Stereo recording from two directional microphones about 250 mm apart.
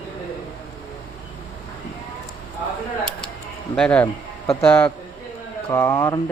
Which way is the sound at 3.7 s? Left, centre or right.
Centre.